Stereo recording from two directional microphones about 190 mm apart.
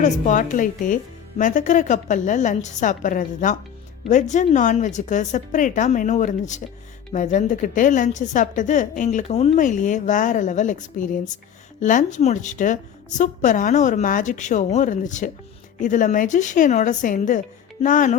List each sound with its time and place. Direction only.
0.0 s a woman's voice: 40° left (ahead or behind)